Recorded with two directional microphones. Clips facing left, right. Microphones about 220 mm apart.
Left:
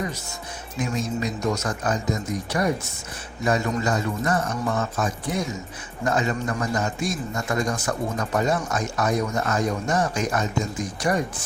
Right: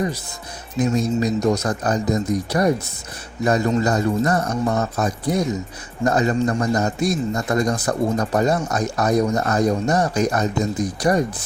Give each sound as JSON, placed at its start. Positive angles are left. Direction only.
{"t": 0.8, "sound": "a man's voice", "side_deg": -35}